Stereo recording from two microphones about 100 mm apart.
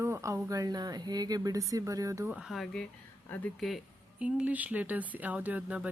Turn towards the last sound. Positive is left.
turn(degrees=-15)  # may be behind; listen again after turning